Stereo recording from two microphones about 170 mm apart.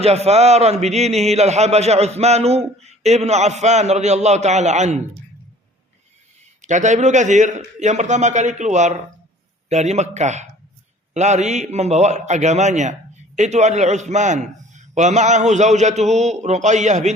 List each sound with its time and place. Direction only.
0.0 s a man's voice: 35° right (ahead or behind)
6.6 s a man's voice: 45° right (ahead or behind)